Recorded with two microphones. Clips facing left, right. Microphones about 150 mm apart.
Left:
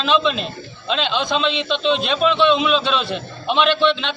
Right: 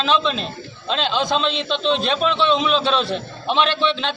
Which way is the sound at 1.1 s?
35° right (ahead or behind).